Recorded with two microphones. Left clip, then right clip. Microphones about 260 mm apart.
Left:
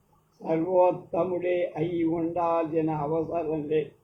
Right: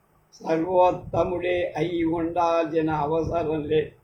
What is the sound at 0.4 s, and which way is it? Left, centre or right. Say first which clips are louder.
Speech: right 2 dB; right.